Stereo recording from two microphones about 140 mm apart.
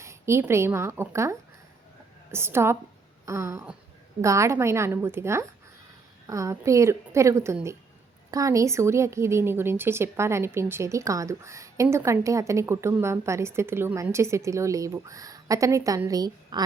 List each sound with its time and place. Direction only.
0.0 s a woman's voice: 20° right (ahead or behind)